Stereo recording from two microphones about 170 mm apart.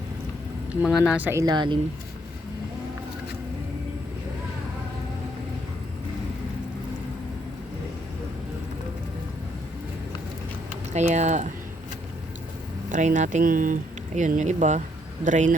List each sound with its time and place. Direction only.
0.9 s speech: centre (ahead or behind)
1.5 s speech: 25° right (ahead or behind)
10.9 s speech: 45° right (ahead or behind)
12.9 s speech: 45° right (ahead or behind)